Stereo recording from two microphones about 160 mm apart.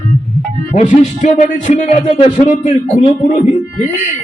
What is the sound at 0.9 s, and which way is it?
A man's voice, 45° left (ahead or behind).